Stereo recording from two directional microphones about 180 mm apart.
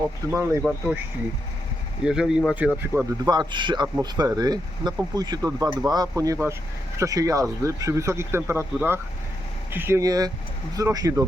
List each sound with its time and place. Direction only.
0.3 s speech: 15° right (ahead or behind)
2.0 s speech: 5° right (ahead or behind)
3.2 s speech: 25° right (ahead or behind)